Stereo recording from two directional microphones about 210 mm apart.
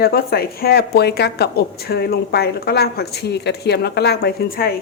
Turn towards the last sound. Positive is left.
turn(degrees=50)  # may be behind; listen again after turning